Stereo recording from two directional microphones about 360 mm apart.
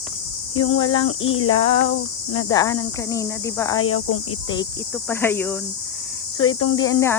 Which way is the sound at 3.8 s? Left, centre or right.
Left.